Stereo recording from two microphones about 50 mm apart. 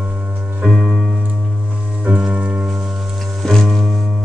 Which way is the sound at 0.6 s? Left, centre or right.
Centre.